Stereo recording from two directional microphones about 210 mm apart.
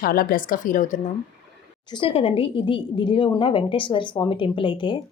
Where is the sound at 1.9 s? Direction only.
25° left (ahead or behind).